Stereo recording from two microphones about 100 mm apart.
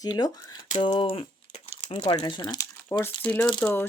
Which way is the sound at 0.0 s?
45° left (ahead or behind).